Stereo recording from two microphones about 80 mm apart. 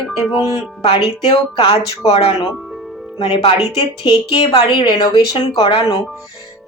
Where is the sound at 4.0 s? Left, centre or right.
Left.